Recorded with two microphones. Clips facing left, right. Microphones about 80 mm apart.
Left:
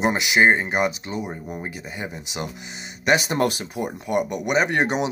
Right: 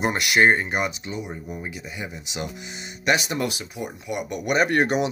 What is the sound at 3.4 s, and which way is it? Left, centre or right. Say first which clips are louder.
Speech: left 5 dB; left.